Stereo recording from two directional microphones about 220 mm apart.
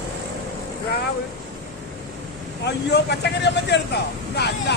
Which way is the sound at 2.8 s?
50° left (ahead or behind).